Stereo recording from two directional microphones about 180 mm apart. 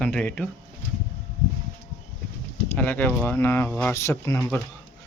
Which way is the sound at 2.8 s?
10° left (ahead or behind).